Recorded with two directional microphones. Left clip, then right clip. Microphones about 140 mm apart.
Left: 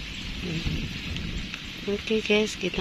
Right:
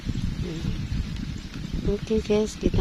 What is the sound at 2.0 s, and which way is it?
Speech, 10° right (ahead or behind).